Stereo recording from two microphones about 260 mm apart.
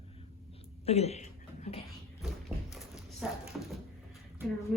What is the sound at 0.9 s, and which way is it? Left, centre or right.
Speech, left.